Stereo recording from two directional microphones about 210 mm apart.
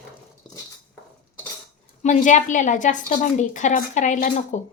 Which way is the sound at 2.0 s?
35° left (ahead or behind).